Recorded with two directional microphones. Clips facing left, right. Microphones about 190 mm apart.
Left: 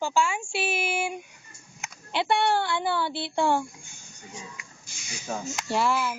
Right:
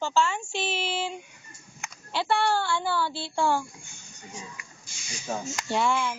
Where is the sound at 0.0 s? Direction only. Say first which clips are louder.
Even; 10° left (ahead or behind).